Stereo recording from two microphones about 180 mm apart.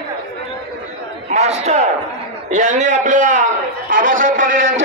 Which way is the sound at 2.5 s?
40° right (ahead or behind).